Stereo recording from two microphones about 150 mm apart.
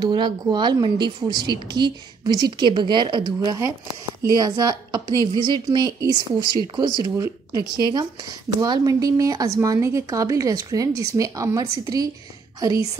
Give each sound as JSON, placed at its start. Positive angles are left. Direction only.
{"t": 0.0, "sound": "a woman's voice", "side_deg": -30}